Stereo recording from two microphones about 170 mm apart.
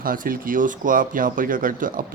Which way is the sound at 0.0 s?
55° right (ahead or behind).